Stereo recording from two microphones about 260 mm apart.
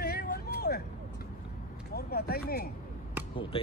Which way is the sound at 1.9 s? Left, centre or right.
Left.